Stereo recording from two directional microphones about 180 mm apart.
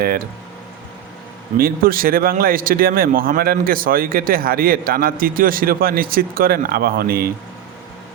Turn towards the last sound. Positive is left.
turn(degrees=-55)  # may be behind; listen again after turning